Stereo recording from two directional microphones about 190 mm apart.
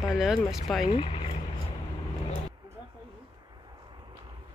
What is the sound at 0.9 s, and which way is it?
Speech, 30° left (ahead or behind).